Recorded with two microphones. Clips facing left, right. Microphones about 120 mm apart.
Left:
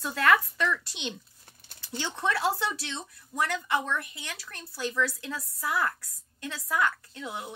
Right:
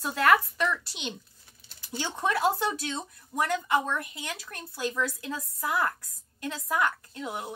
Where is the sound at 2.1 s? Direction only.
15° right (ahead or behind).